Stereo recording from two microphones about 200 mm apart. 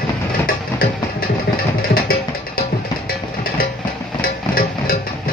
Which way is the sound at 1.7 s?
45° left (ahead or behind).